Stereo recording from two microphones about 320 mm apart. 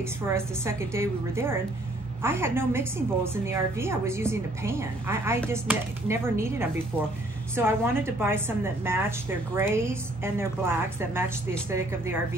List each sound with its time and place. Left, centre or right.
0.3 s a woman's voice: centre